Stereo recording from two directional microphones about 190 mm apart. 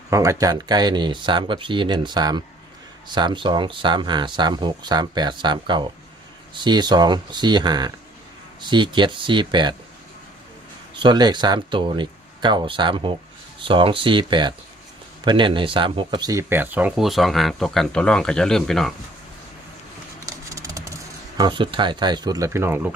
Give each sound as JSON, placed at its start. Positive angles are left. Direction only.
{"t": 0.1, "sound": "speech", "side_deg": -15}
{"t": 11.0, "sound": "speech", "side_deg": -25}
{"t": 20.2, "sound": "computer keyboard", "side_deg": -15}
{"t": 21.3, "sound": "speech", "side_deg": -25}